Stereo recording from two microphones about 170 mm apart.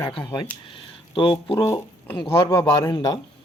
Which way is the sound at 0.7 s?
30° left (ahead or behind).